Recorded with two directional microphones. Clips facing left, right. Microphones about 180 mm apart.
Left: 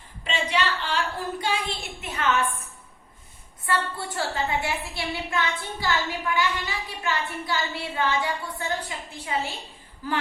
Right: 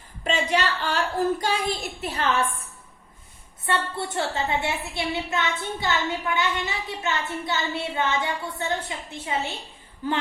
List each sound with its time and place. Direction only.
0.3 s a woman's voice: 45° right (ahead or behind)
3.7 s a woman's voice: 25° right (ahead or behind)